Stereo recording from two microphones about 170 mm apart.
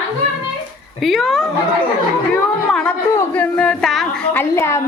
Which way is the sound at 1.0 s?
Centre (ahead or behind).